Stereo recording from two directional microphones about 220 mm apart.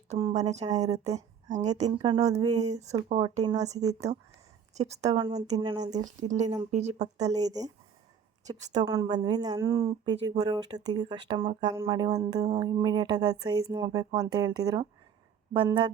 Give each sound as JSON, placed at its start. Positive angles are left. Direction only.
{"t": 0.1, "sound": "a woman's voice", "side_deg": -25}
{"t": 6.0, "sound": "a woman's voice", "side_deg": -35}
{"t": 8.8, "sound": "speech", "side_deg": -20}